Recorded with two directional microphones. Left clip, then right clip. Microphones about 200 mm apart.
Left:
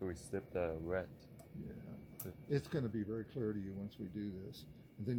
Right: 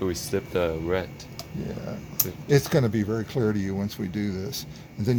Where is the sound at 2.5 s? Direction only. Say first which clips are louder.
Right 17 dB; 50° right (ahead or behind).